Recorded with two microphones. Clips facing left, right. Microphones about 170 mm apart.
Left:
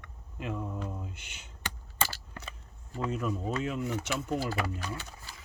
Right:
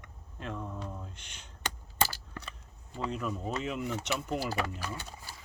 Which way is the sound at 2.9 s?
5° left (ahead or behind).